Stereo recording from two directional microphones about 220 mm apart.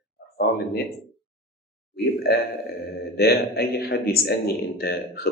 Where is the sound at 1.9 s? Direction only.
45° left (ahead or behind).